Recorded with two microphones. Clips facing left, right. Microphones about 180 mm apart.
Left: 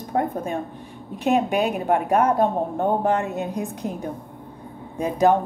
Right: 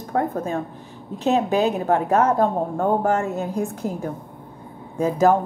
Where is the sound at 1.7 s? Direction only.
15° left (ahead or behind).